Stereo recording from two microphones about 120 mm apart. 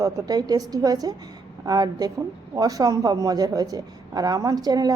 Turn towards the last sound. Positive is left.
turn(degrees=-35)  # may be behind; listen again after turning